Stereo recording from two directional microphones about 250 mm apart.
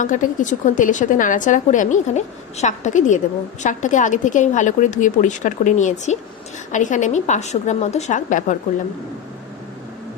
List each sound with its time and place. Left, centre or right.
0.0 s a woman's voice: left